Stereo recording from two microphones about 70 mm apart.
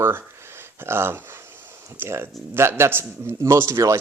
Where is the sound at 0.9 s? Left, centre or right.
Right.